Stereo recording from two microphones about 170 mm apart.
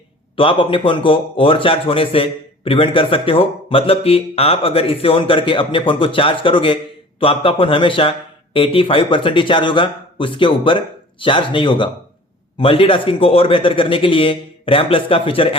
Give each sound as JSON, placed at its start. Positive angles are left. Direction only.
{"t": 0.3, "sound": "a man's voice", "side_deg": 30}